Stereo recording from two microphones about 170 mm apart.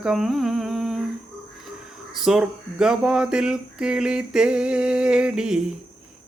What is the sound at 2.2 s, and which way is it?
Speech, 5° right (ahead or behind).